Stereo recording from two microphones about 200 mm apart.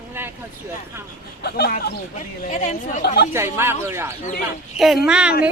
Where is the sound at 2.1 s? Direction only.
35° left (ahead or behind).